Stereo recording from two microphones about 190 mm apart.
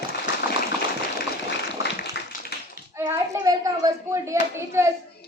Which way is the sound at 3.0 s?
15° right (ahead or behind).